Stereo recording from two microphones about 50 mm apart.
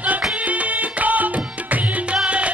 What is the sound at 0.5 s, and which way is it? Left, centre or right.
Music, right.